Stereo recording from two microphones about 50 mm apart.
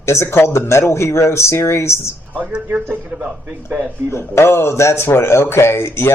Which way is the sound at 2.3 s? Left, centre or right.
Right.